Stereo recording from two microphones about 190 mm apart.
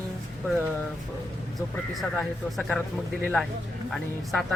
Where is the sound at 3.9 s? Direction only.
Centre (ahead or behind).